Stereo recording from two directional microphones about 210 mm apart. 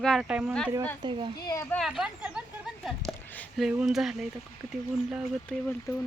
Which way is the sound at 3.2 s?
10° left (ahead or behind).